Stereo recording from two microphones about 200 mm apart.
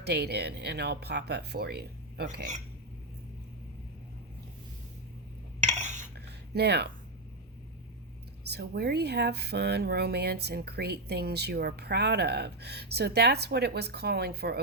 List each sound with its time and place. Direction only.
0.0 s speech: 55° right (ahead or behind)
5.6 s dishes: 35° right (ahead or behind)
6.1 s a sound: 55° right (ahead or behind)
8.4 s speech: 55° right (ahead or behind)